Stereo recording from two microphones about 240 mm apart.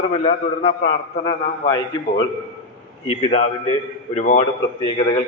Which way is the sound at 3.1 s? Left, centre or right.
Left.